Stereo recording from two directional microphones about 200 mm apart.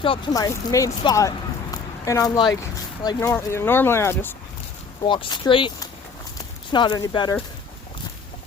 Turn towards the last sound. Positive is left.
turn(degrees=20)  # may be behind; listen again after turning